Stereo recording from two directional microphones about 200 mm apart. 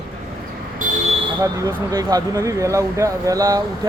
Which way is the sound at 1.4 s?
15° right (ahead or behind).